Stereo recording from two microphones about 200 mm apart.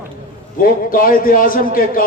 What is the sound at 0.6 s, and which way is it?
A man's voice, 45° left (ahead or behind).